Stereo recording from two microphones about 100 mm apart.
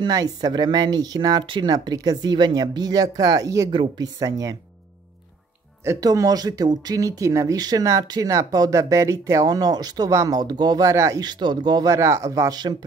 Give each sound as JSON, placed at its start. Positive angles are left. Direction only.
{"t": 0.0, "sound": "speech", "side_deg": -40}
{"t": 3.7, "sound": "speech", "side_deg": -55}
{"t": 4.2, "sound": "speech", "side_deg": -35}
{"t": 5.9, "sound": "speech", "side_deg": -35}
{"t": 11.2, "sound": "speech", "side_deg": -45}